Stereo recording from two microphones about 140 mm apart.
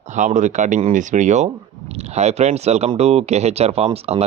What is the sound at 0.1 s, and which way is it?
Speech, 60° right (ahead or behind).